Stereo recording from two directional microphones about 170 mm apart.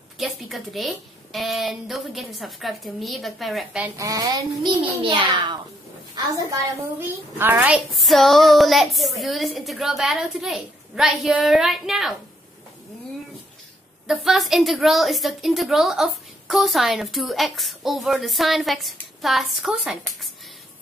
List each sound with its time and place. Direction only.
0.2 s a woman's voice: centre (ahead or behind)
4.0 s a child's voice: 20° right (ahead or behind); by 12.1 s centre (ahead or behind)
14.0 s a woman's voice: centre (ahead or behind)